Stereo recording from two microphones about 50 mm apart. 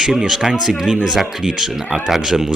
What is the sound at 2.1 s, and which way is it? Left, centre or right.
Speech, centre.